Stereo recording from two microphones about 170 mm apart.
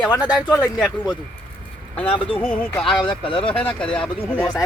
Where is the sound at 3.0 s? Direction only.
30° left (ahead or behind).